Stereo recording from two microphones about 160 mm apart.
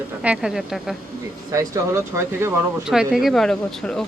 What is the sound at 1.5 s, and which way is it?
Speech, 20° right (ahead or behind).